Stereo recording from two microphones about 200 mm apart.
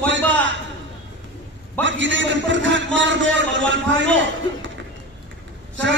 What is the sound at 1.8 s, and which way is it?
A man's voice, 65° right (ahead or behind).